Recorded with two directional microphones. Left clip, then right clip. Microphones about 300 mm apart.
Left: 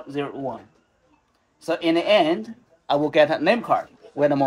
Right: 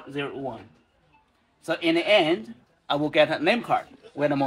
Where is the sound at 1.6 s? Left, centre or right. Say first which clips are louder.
Left 2 dB; left.